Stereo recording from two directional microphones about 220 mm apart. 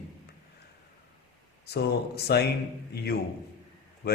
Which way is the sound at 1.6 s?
50° left (ahead or behind).